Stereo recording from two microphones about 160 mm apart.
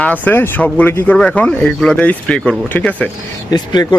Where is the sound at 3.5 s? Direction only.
25° left (ahead or behind).